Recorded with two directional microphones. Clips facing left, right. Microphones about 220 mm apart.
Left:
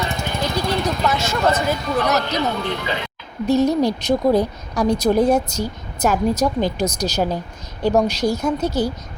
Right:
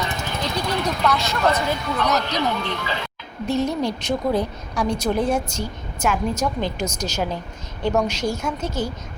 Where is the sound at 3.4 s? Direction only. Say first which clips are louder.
Left 6 dB; 40° left (ahead or behind).